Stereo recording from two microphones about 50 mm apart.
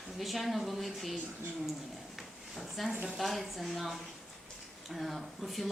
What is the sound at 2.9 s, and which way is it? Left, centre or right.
Speech, centre.